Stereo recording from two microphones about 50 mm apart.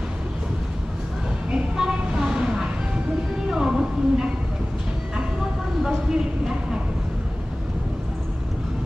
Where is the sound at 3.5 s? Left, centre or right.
Centre.